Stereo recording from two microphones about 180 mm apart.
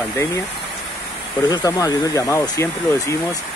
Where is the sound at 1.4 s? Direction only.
20° left (ahead or behind).